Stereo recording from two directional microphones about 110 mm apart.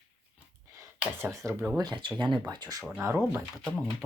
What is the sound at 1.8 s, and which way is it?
Speech, 45° right (ahead or behind).